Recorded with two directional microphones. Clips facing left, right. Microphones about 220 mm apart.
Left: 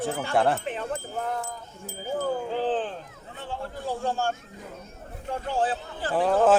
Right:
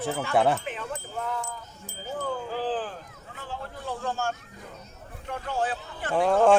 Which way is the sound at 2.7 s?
25° left (ahead or behind).